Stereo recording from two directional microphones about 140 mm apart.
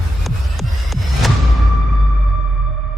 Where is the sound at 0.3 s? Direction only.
Centre (ahead or behind).